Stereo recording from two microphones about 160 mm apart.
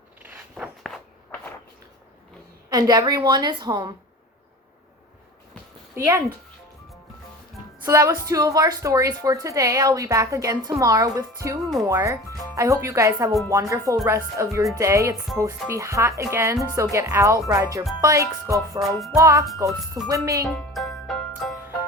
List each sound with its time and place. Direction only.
0.2 s walk: 10° right (ahead or behind)
2.6 s a woman's voice: 25° right (ahead or behind)
7.9 s a woman's voice: 20° right (ahead or behind)
11.6 s music: centre (ahead or behind)
11.9 s a woman's voice: 20° right (ahead or behind)
18.8 s music: centre (ahead or behind)
19.1 s a woman's voice: 20° right (ahead or behind)
20.5 s music: 5° left (ahead or behind)